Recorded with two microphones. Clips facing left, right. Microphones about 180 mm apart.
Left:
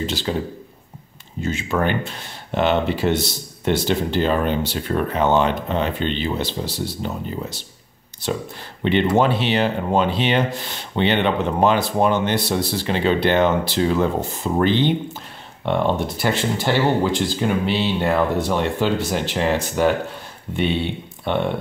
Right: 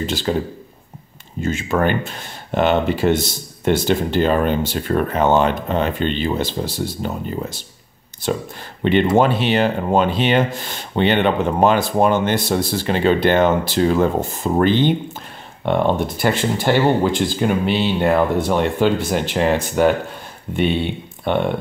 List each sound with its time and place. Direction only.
0.0 s speech: 50° right (ahead or behind)
1.4 s speech: 50° right (ahead or behind)